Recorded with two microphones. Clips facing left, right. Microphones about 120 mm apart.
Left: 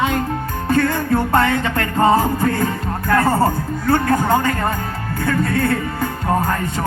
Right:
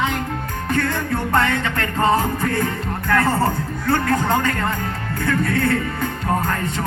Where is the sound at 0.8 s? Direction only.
50° left (ahead or behind).